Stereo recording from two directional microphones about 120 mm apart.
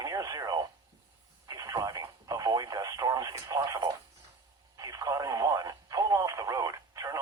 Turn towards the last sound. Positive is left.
turn(degrees=-30)  # may be behind; listen again after turning